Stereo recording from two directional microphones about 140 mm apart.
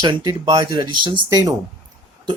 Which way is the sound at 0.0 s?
30° right (ahead or behind).